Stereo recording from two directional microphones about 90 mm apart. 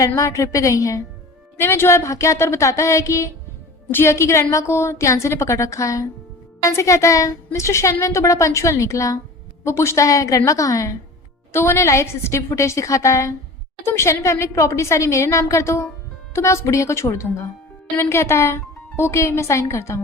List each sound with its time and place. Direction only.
0.2 s a woman's voice: 35° left (ahead or behind)